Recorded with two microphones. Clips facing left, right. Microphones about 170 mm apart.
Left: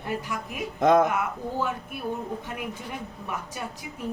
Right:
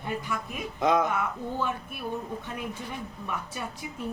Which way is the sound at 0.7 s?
50° left (ahead or behind).